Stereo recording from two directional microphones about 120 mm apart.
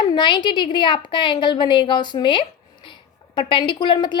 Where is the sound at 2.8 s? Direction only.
40° left (ahead or behind).